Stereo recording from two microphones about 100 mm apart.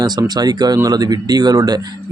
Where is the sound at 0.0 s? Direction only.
40° right (ahead or behind).